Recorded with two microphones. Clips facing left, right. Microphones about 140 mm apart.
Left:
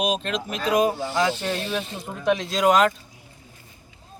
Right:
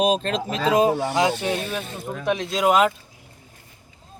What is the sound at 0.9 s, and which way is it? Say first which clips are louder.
Speech: right 6 dB; 75° right (ahead or behind).